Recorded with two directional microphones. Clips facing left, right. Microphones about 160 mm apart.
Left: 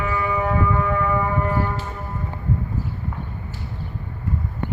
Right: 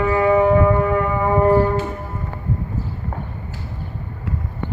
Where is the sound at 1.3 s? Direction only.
45° right (ahead or behind).